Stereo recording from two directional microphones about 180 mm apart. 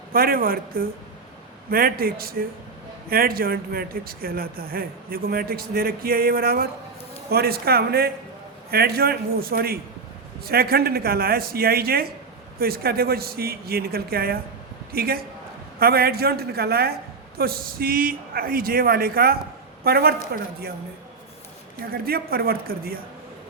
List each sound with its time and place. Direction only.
0.1 s speech: 55° right (ahead or behind)
22.0 s speech: 55° right (ahead or behind)